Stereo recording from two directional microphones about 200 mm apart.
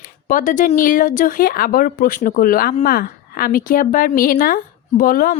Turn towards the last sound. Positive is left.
turn(degrees=45)  # may be behind; listen again after turning